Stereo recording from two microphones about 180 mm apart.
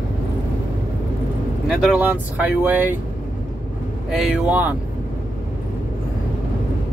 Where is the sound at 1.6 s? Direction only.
10° right (ahead or behind).